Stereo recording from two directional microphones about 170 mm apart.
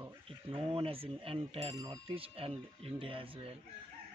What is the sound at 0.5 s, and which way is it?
A man's voice, 30° right (ahead or behind).